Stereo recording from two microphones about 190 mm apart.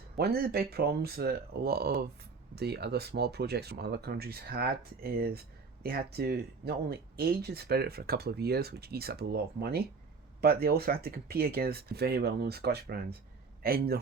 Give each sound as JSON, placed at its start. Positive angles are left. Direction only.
{"t": 0.2, "sound": "a man's voice", "side_deg": -55}